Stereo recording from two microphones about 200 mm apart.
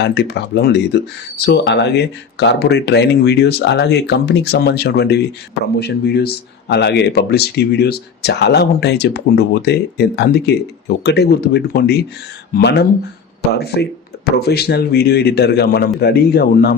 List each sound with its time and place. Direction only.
0.0 s a man's voice: 55° left (ahead or behind)